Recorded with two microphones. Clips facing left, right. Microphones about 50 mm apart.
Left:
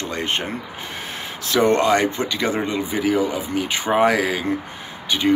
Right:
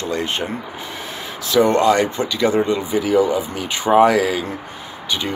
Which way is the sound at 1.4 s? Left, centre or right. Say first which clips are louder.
Right 3 dB; left.